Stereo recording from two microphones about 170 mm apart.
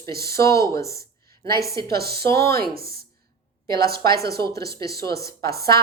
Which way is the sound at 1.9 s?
65° right (ahead or behind).